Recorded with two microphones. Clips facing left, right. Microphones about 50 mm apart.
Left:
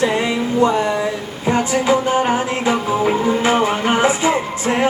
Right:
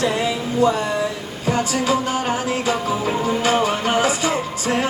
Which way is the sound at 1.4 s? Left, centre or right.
Left.